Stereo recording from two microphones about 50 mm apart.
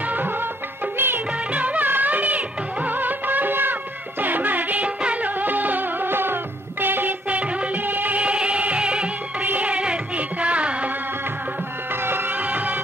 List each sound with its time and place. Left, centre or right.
0.9 s music: right
1.5 s music: right
7.2 s music: right
11.9 s music: right